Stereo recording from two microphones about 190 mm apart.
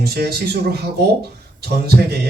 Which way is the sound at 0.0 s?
55° right (ahead or behind).